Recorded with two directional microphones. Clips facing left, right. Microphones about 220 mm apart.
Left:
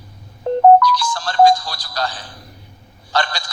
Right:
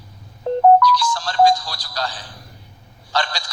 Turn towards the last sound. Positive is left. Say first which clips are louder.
# left 2 dB
turn(degrees=55)  # may be behind; listen again after turning